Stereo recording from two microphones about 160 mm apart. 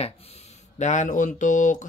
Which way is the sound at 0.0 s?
40° left (ahead or behind).